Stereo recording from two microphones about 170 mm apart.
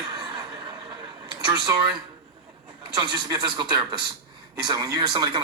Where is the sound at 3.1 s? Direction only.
25° right (ahead or behind).